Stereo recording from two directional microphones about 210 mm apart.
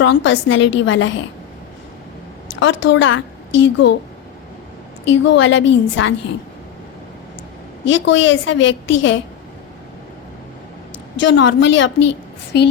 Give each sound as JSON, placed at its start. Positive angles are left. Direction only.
{"t": 0.0, "sound": "a woman's voice", "side_deg": 60}
{"t": 2.6, "sound": "a woman's voice", "side_deg": 60}
{"t": 5.0, "sound": "a woman's voice", "side_deg": 60}
{"t": 7.9, "sound": "a woman's voice", "side_deg": 60}
{"t": 11.2, "sound": "a woman's voice", "side_deg": 60}